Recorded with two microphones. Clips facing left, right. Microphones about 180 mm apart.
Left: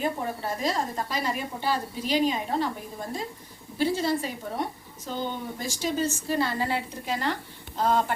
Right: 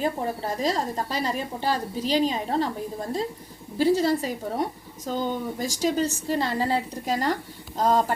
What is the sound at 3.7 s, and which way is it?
A woman's voice, 40° right (ahead or behind).